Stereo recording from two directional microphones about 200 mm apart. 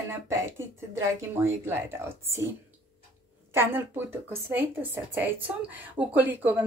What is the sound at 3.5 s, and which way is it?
A woman's voice, 10° right (ahead or behind).